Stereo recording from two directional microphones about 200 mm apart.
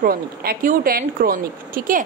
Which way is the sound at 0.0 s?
45° right (ahead or behind).